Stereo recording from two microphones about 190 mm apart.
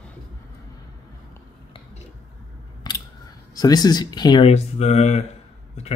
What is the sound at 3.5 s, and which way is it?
Speech, 20° left (ahead or behind).